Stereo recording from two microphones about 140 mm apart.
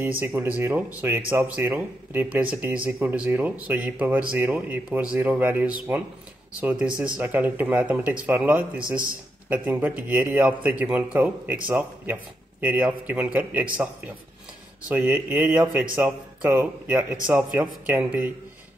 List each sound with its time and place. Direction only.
0.2 s a man's voice: 15° right (ahead or behind)
14.8 s a man's voice: 10° right (ahead or behind)